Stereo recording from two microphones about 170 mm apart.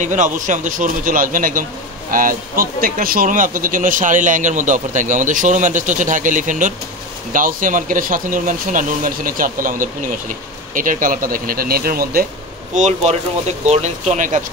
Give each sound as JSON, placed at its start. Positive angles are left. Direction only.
{"t": 0.0, "sound": "speech", "side_deg": -45}
{"t": 12.7, "sound": "speech", "side_deg": -45}